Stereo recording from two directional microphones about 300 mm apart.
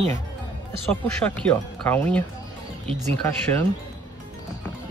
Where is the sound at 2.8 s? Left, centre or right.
Centre.